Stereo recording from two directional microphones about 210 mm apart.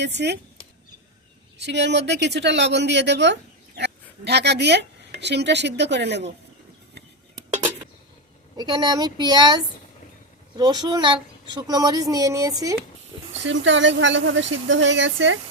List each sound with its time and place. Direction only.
0.0 s speech: 55° right (ahead or behind)
1.5 s speech: 55° right (ahead or behind)
8.5 s a woman's voice: 20° right (ahead or behind)
13.4 s speech: 60° right (ahead or behind)